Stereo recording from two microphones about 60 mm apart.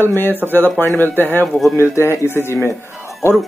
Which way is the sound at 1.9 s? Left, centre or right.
Left.